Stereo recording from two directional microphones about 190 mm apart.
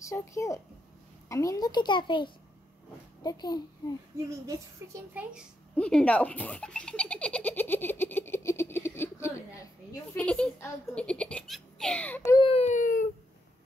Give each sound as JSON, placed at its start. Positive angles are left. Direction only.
{"t": 0.0, "sound": "a child's voice", "side_deg": 15}
{"t": 4.8, "sound": "a child's voice", "side_deg": -15}
{"t": 5.8, "sound": "baby laughter", "side_deg": 5}
{"t": 10.1, "sound": "a child's voice", "side_deg": 5}
{"t": 12.4, "sound": "baby cry", "side_deg": 35}